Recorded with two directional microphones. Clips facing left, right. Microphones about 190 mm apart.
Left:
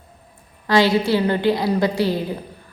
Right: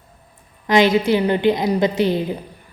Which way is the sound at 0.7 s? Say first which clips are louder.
Right 2 dB; 20° right (ahead or behind).